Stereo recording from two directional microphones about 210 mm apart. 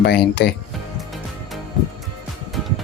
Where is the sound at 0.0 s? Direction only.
50° left (ahead or behind).